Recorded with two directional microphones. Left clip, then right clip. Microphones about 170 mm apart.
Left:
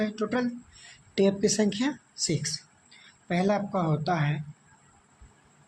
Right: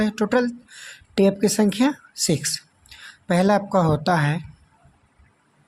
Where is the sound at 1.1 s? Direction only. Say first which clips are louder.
Right 5 dB; 40° right (ahead or behind); by 4.4 s 60° right (ahead or behind).